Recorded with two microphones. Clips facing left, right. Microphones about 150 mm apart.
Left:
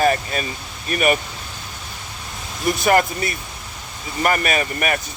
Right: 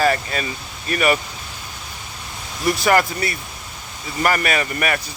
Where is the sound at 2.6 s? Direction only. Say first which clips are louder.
Even; 20° left (ahead or behind).